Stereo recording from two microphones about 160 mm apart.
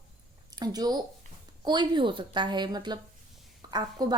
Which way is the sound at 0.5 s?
25° right (ahead or behind).